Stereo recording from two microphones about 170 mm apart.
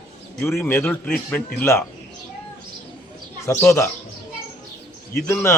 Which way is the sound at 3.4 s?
15° left (ahead or behind).